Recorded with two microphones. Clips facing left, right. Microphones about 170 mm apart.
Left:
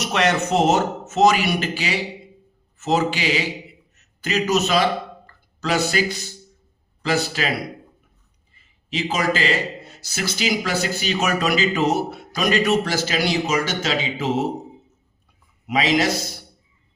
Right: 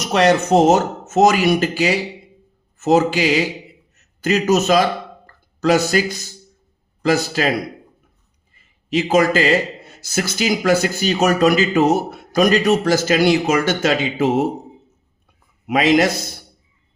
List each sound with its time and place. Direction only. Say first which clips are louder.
0.0 s speech: right 5 dB; 35° right (ahead or behind)
5.2 s a sound: right 10 dB; 45° right (ahead or behind)
7.0 s speech: right 5 dB; 45° right (ahead or behind)
8.9 s speech: right 7 dB; 45° right (ahead or behind)
15.6 s speech: right 5 dB; 50° right (ahead or behind)